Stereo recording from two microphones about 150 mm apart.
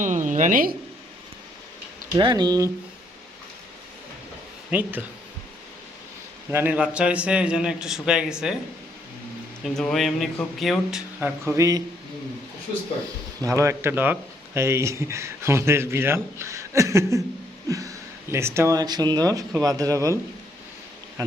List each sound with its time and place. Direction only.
0.0 s a woman's voice: 55° right (ahead or behind)
2.1 s speech: 30° right (ahead or behind)
4.7 s speech: 10° right (ahead or behind)
6.5 s speech: 10° right (ahead or behind)
9.6 s speech: centre (ahead or behind)
11.2 s speech: 20° right (ahead or behind)
13.4 s speech: 20° right (ahead or behind)
21.2 s speech: 25° right (ahead or behind)